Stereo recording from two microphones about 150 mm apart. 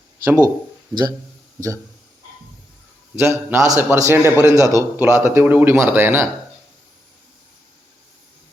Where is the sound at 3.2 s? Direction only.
15° right (ahead or behind).